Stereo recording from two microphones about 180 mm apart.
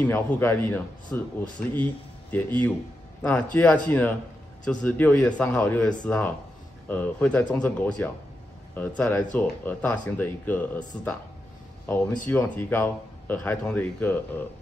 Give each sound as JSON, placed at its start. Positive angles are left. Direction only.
{"t": 0.0, "sound": "speech", "side_deg": 10}
{"t": 11.8, "sound": "speech", "side_deg": 10}